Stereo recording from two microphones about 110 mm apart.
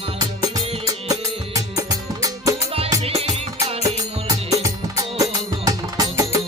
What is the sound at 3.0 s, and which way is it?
Music, 65° right (ahead or behind).